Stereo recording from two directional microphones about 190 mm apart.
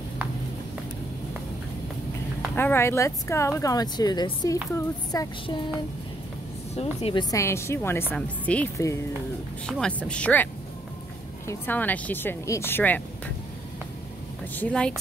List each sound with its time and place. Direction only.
2.5 s a woman's voice: 10° left (ahead or behind)
4.7 s child singing: 20° left (ahead or behind)
6.7 s a woman's voice: 35° left (ahead or behind); by 13.0 s 10° left (ahead or behind)
14.5 s speech: 5° left (ahead or behind)